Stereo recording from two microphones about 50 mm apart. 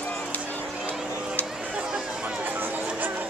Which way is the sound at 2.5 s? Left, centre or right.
Right.